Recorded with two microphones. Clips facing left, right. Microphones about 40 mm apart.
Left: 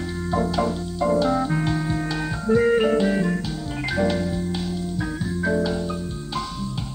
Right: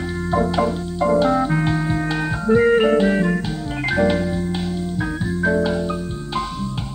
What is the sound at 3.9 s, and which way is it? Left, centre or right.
Organ, right.